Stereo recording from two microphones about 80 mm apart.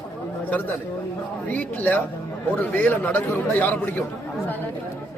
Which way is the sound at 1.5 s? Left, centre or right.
Left.